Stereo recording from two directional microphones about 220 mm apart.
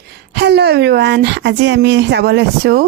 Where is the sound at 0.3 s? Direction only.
50° right (ahead or behind).